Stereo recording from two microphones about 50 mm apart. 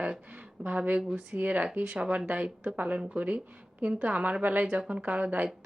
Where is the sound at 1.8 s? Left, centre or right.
Right.